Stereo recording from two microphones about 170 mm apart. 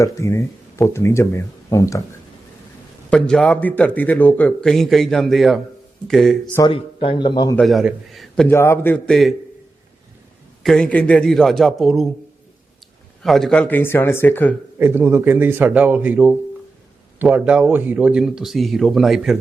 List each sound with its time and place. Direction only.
0.0 s speech: 15° left (ahead or behind)
3.1 s a man's voice: 5° left (ahead or behind)
6.7 s a man's voice: 30° left (ahead or behind)
7.5 s a man's voice: centre (ahead or behind)
8.4 s speech: 15° left (ahead or behind)
10.6 s a man's voice: 5° left (ahead or behind)
13.2 s speech: centre (ahead or behind)
14.8 s a man's voice: 10° right (ahead or behind)